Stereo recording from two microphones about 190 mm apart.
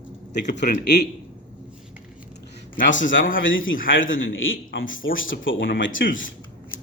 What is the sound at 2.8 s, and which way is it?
Speech, 75° left (ahead or behind).